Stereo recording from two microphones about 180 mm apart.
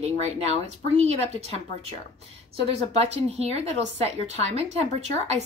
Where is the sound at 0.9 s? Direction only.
35° right (ahead or behind).